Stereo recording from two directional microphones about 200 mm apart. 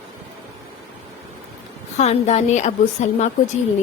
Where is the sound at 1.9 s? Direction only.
35° left (ahead or behind).